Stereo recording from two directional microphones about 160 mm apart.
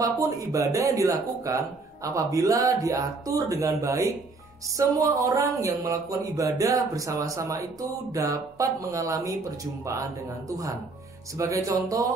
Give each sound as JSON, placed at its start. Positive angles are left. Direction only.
{"t": 0.0, "sound": "speech", "side_deg": -20}
{"t": 11.3, "sound": "speech", "side_deg": -20}